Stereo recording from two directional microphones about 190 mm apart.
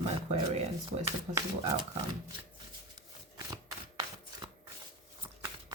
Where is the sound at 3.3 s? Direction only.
20° right (ahead or behind).